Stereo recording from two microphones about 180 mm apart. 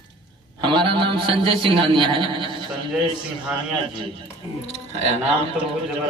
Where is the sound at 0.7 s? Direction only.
30° right (ahead or behind).